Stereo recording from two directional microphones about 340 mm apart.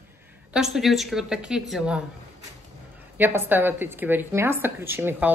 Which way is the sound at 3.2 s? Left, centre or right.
Centre.